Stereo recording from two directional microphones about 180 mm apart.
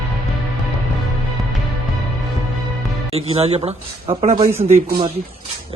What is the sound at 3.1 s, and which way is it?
Speech, 35° right (ahead or behind).